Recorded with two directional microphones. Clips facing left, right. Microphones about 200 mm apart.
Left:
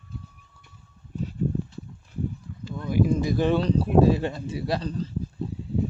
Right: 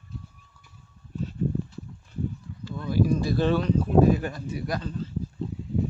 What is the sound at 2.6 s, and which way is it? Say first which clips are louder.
Speech: left 1 dB; 15° left (ahead or behind).